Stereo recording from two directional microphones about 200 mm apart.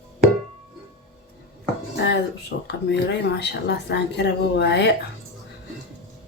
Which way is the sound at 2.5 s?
60° left (ahead or behind).